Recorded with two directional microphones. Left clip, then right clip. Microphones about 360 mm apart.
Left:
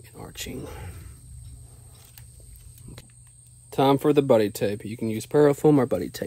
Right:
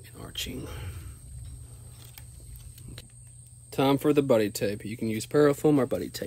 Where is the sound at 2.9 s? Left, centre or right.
Centre.